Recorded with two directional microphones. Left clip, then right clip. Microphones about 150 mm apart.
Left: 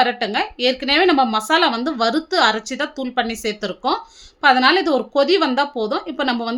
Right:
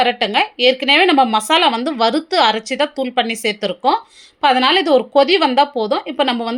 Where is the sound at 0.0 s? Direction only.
10° right (ahead or behind).